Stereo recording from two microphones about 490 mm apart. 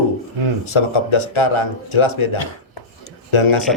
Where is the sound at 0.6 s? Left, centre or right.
Left.